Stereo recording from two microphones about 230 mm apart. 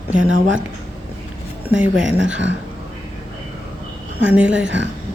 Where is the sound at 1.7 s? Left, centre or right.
Centre.